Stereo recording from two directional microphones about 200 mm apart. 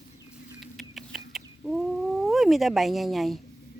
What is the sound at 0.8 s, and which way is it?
Chicken, centre (ahead or behind).